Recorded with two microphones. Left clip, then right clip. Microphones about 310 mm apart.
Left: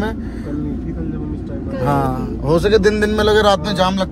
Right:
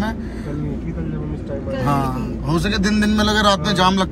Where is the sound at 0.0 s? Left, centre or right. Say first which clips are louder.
Left 2 dB; left.